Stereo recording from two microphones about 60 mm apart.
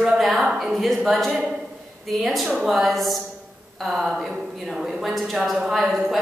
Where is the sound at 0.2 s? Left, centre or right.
Centre.